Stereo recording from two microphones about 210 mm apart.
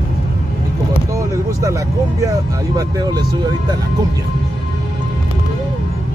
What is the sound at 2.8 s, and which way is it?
Music, 20° right (ahead or behind).